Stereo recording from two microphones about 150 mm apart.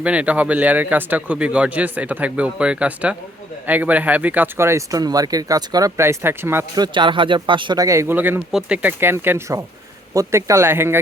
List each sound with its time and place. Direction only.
0.0 s speech: 10° right (ahead or behind)
6.7 s speech: 30° right (ahead or behind)